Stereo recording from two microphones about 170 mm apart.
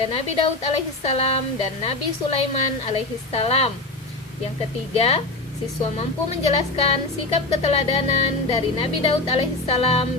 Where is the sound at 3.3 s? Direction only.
35° left (ahead or behind).